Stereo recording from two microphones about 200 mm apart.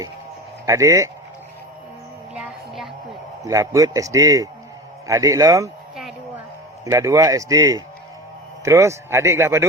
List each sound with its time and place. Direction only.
0.6 s a man's voice: 15° right (ahead or behind)
2.3 s music: 5° right (ahead or behind)
3.4 s a man's voice: 15° right (ahead or behind)
6.8 s a man's voice: 15° right (ahead or behind)